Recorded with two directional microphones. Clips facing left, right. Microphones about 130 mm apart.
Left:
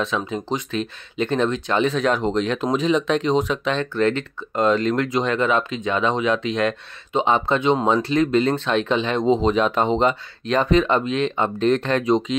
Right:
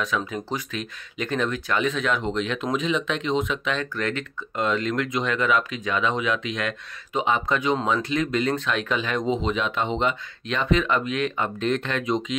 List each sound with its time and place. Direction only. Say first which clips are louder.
0.0 s speech: left 3 dB; 25° left (ahead or behind)